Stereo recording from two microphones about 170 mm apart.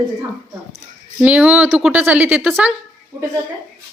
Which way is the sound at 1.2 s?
5° right (ahead or behind).